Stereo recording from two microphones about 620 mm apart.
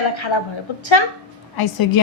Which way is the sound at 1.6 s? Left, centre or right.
Left.